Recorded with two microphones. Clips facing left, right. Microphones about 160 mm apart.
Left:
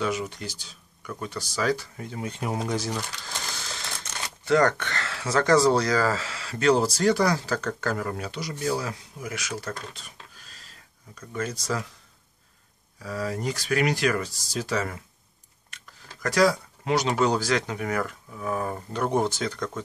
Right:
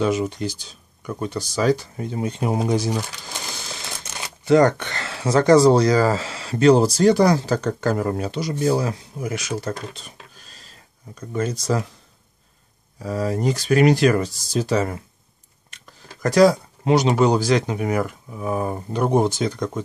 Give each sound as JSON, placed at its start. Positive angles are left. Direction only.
{"t": 0.0, "sound": "speech", "side_deg": -25}
{"t": 11.1, "sound": "speech", "side_deg": -20}
{"t": 13.0, "sound": "speech", "side_deg": -30}
{"t": 16.2, "sound": "speech", "side_deg": -25}